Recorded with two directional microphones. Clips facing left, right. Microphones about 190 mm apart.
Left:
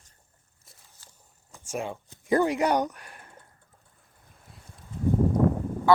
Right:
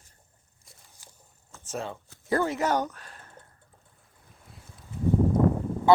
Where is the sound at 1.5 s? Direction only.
10° left (ahead or behind).